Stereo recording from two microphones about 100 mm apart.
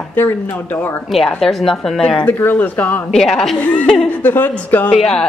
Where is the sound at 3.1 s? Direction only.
5° left (ahead or behind).